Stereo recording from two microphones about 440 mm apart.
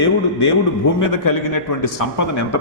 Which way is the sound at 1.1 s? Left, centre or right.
Left.